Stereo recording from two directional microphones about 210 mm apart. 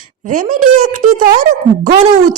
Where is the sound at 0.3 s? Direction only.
40° right (ahead or behind).